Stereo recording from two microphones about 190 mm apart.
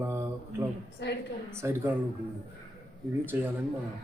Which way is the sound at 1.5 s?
15° right (ahead or behind).